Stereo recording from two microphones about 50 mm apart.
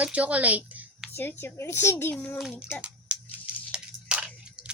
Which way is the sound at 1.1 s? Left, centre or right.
Left.